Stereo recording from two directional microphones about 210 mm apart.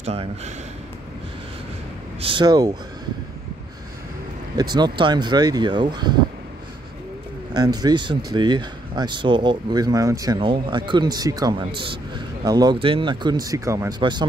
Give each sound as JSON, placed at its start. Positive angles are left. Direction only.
{"t": 0.0, "sound": "speech", "side_deg": -30}
{"t": 2.1, "sound": "speech", "side_deg": -25}
{"t": 4.6, "sound": "speech", "side_deg": -20}
{"t": 7.5, "sound": "speech", "side_deg": -20}